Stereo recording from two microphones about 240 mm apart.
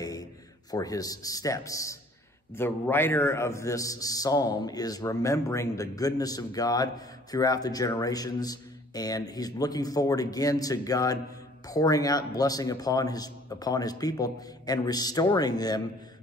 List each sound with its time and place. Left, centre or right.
0.0 s a man's voice: centre